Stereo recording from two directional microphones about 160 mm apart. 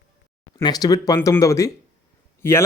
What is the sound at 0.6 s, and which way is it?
Speech, 25° left (ahead or behind).